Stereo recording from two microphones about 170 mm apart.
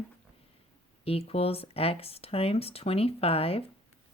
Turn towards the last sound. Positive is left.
turn(degrees=35)  # may be behind; listen again after turning